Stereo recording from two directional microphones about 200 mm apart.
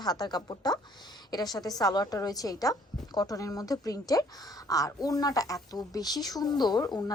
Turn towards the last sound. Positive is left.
turn(degrees=20)  # may be behind; listen again after turning